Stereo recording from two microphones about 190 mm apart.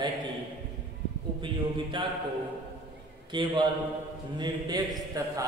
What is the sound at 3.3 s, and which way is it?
A man's voice, 25° right (ahead or behind).